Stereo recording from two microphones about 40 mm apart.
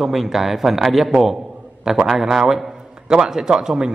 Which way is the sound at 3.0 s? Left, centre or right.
Centre.